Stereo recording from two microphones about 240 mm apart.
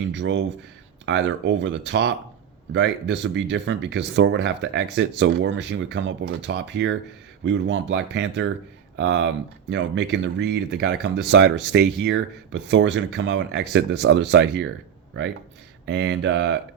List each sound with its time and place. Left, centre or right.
0.1 s speech: right
15.9 s speech: right